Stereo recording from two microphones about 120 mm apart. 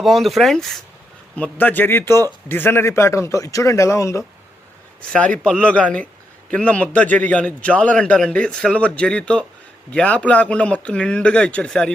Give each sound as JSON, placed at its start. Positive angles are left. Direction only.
{"t": 0.0, "sound": "speech", "side_deg": 0}
{"t": 1.4, "sound": "a man's voice", "side_deg": 15}
{"t": 5.1, "sound": "a man's voice", "side_deg": 10}